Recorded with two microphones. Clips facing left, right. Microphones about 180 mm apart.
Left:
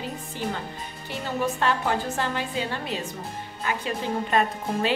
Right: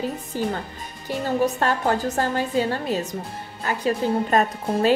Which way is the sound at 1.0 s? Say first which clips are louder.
Right 6 dB; 40° right (ahead or behind).